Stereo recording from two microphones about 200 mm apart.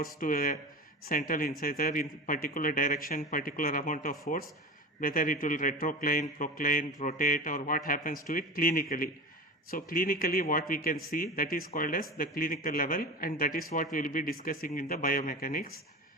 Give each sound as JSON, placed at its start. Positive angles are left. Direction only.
{"t": 0.0, "sound": "a man's voice", "side_deg": 45}